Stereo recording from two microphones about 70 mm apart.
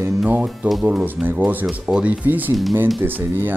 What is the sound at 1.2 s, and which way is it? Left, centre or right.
Speech, right.